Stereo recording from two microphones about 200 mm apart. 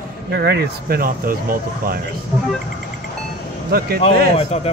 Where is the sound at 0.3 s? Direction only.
55° right (ahead or behind).